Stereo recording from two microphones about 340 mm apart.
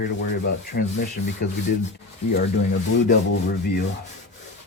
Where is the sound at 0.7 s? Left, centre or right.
Left.